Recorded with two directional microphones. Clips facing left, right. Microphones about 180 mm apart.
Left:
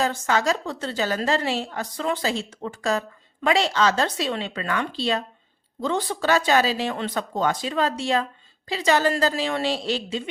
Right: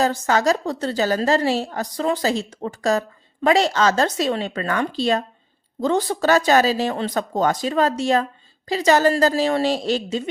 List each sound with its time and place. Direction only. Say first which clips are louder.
0.0 s a woman's voice: right 4 dB; 40° right (ahead or behind)